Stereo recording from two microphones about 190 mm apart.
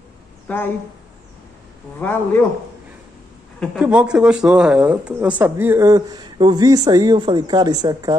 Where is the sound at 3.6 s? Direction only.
5° right (ahead or behind).